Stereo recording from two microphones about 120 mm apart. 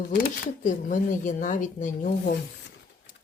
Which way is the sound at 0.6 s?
90° left.